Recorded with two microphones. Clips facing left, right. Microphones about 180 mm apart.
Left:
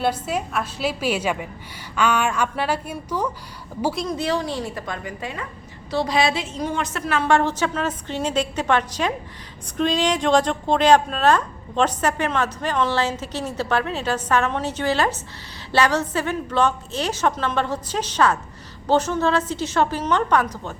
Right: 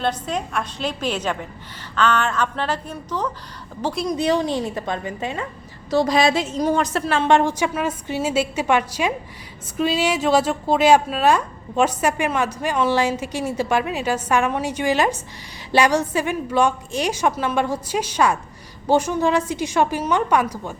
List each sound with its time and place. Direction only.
0.0 s a woman's voice: 10° left (ahead or behind)
4.0 s a woman's voice: 15° right (ahead or behind)
5.9 s a woman's voice: 45° right (ahead or behind); by 20.7 s 10° right (ahead or behind)